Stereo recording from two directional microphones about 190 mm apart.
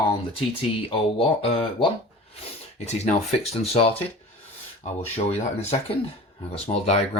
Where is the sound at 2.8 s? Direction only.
35° left (ahead or behind).